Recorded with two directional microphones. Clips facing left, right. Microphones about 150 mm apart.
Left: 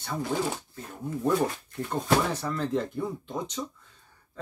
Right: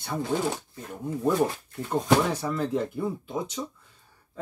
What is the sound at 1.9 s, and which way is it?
Speech, 10° right (ahead or behind).